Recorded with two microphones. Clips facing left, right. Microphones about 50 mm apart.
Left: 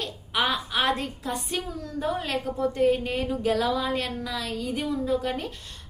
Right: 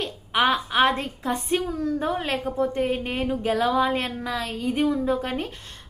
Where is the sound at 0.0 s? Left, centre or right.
Right.